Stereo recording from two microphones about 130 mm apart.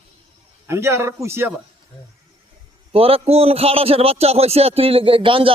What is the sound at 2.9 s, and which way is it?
A man's voice, 50° right (ahead or behind).